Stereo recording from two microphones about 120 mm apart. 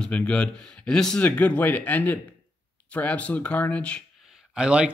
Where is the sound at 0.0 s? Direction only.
10° left (ahead or behind).